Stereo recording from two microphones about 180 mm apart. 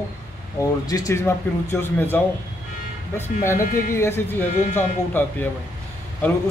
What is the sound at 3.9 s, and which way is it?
Speech, 15° left (ahead or behind).